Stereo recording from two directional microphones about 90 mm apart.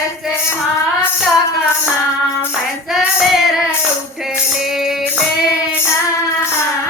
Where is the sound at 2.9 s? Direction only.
Centre (ahead or behind).